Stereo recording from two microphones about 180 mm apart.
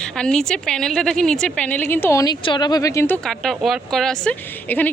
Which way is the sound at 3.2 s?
Centre (ahead or behind).